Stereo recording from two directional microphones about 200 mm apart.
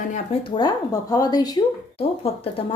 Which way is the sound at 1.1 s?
20° left (ahead or behind).